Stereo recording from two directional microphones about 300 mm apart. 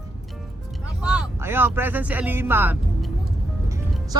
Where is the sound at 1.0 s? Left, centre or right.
Centre.